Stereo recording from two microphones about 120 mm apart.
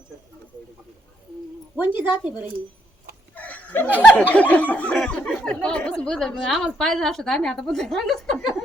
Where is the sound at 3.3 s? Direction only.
10° left (ahead or behind).